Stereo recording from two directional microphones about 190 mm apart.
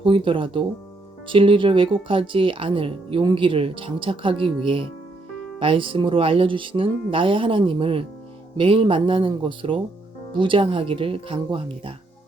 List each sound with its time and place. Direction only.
0.0 s speech: 25° right (ahead or behind)